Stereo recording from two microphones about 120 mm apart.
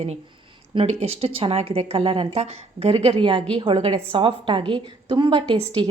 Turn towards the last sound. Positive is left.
turn(degrees=-45)  # may be behind; listen again after turning